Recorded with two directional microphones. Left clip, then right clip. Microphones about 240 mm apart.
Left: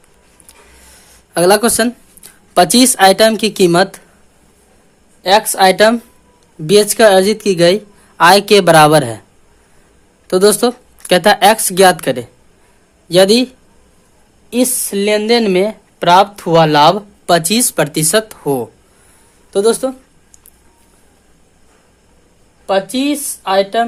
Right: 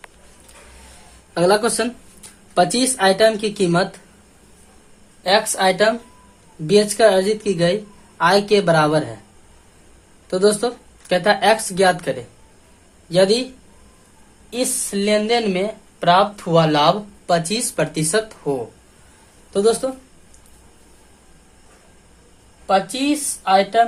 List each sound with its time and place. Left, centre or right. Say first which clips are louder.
1.3 s a woman's voice: left 6 dB; left
5.2 s a woman's voice: left 7 dB; left
10.2 s a woman's voice: left 7 dB; left
14.5 s a woman's voice: left 7 dB; left
22.6 s a woman's voice: left 3 dB; left